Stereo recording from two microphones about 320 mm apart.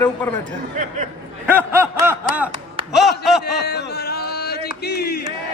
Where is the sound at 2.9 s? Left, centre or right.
Centre.